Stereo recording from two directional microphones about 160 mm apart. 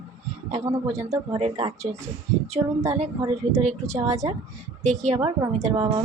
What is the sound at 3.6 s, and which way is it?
Speech, 45° right (ahead or behind).